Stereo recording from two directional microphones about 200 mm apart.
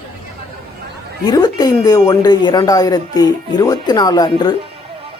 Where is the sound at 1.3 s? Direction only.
20° left (ahead or behind).